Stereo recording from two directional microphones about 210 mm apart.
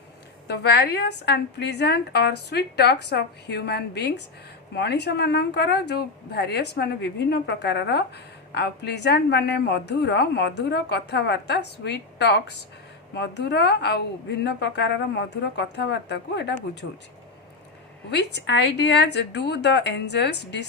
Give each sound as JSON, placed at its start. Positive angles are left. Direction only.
{"t": 0.4, "sound": "a woman's voice", "side_deg": 50}
{"t": 18.3, "sound": "a woman's voice", "side_deg": 55}